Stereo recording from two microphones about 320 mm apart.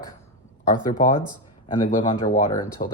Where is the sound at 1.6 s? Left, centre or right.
Centre.